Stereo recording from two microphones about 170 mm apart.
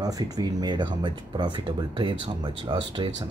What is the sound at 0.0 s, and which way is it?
Speech, 20° right (ahead or behind).